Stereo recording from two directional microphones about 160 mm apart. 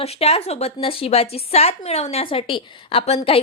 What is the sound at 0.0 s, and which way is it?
A woman's voice, 40° left (ahead or behind).